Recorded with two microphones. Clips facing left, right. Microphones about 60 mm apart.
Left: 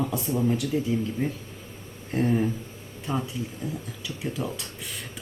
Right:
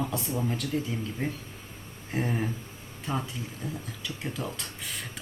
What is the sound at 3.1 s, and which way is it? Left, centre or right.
Speech, centre.